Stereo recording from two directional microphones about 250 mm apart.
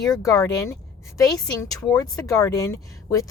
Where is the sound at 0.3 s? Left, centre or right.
Centre.